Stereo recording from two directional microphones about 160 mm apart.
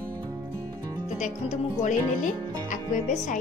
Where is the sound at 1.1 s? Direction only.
50° left (ahead or behind).